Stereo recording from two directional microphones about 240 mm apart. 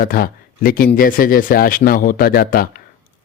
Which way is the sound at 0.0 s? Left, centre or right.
Left.